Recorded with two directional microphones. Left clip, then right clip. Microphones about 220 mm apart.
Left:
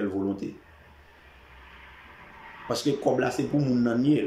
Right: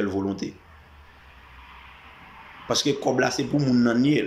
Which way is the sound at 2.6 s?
5° left (ahead or behind).